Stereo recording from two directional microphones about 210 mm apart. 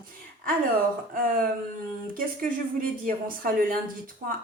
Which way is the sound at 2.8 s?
40° right (ahead or behind).